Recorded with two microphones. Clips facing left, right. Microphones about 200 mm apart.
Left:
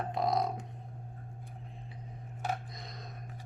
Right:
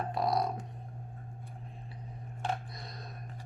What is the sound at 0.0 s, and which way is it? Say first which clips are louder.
Didgeridoo: even; 20° left (ahead or behind).